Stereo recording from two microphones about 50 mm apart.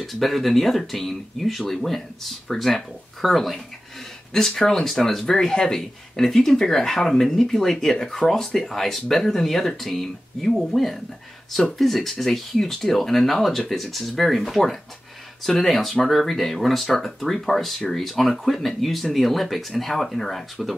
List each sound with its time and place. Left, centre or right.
0.0 s speech: centre